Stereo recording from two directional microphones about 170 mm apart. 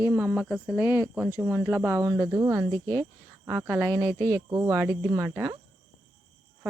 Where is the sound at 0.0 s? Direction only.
15° right (ahead or behind).